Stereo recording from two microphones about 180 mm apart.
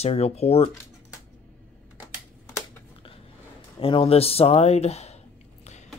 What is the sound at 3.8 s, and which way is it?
Speech, 30° left (ahead or behind).